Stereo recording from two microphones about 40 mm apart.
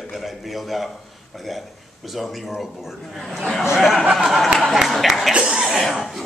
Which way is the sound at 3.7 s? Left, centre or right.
Centre.